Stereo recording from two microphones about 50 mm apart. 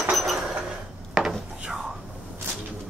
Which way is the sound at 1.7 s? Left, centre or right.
Centre.